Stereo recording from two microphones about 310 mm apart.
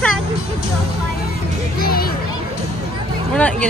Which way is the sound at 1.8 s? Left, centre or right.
Left.